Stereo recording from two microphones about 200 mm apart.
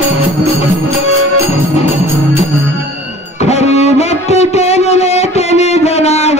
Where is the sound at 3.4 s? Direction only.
30° left (ahead or behind).